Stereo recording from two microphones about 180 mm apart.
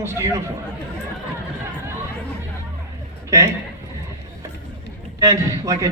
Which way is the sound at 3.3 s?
15° right (ahead or behind).